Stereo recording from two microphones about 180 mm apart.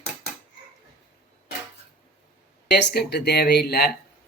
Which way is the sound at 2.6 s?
65° left (ahead or behind).